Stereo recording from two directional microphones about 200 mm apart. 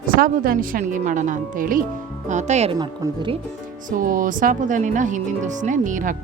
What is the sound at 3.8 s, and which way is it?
Speech, 45° right (ahead or behind).